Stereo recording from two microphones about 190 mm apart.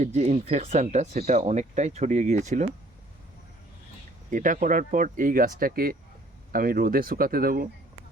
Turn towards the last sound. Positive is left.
turn(degrees=-50)  # may be behind; listen again after turning